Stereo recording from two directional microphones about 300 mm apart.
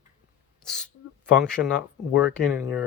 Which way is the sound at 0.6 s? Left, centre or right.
Centre.